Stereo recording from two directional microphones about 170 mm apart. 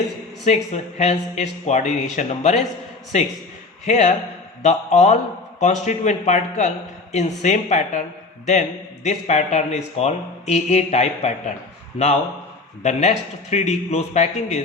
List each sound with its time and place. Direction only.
0.4 s speech: 45° left (ahead or behind)
9.0 s speech: 40° left (ahead or behind)
12.8 s speech: 45° left (ahead or behind)